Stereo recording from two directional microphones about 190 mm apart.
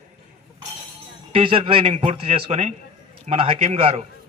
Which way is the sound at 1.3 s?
30° right (ahead or behind).